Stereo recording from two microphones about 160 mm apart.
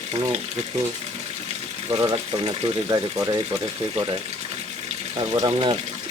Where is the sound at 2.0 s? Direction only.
25° right (ahead or behind).